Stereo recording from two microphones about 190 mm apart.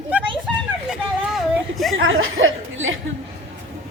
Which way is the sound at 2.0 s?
85° right.